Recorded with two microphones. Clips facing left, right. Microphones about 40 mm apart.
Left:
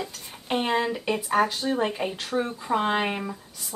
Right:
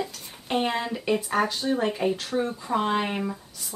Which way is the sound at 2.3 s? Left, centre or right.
Left.